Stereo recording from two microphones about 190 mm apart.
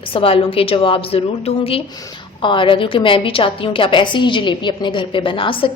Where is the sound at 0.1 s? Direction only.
30° left (ahead or behind).